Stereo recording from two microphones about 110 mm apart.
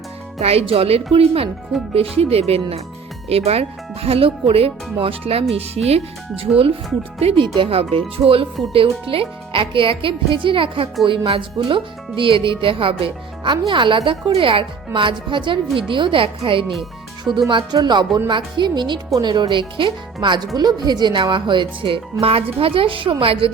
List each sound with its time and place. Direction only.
0.3 s speech: 65° right (ahead or behind)
7.4 s speech: 50° right (ahead or behind)
17.5 s speech: 40° right (ahead or behind); by 23.5 s 55° right (ahead or behind)